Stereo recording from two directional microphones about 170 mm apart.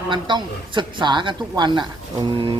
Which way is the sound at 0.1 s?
25° right (ahead or behind).